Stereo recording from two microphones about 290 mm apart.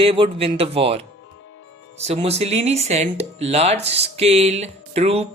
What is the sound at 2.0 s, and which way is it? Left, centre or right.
Speech, right.